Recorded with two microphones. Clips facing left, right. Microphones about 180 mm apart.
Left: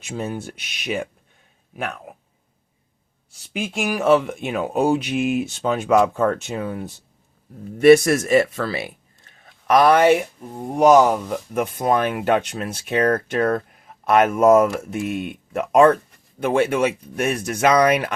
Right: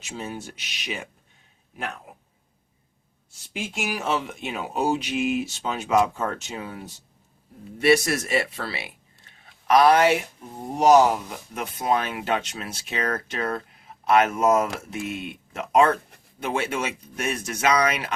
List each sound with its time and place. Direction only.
0.0 s speech: 55° left (ahead or behind)
3.6 s speech: 55° left (ahead or behind)